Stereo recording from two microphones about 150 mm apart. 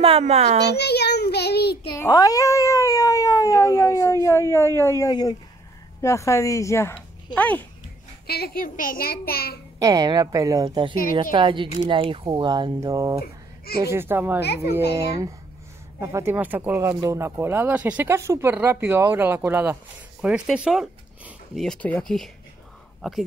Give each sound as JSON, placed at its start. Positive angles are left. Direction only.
{"t": 0.2, "sound": "a child's voice", "side_deg": -45}
{"t": 0.7, "sound": "child singing", "side_deg": 90}
{"t": 1.9, "sound": "speech", "side_deg": 25}
{"t": 8.3, "sound": "a child's voice", "side_deg": 80}
{"t": 9.8, "sound": "a woman's voice", "side_deg": -25}
{"t": 14.4, "sound": "a child's voice", "side_deg": 90}
{"t": 16.0, "sound": "speech", "side_deg": -20}
{"t": 21.5, "sound": "speech", "side_deg": 5}